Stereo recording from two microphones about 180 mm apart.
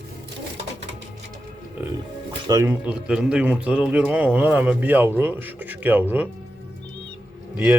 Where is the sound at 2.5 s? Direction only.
15° right (ahead or behind).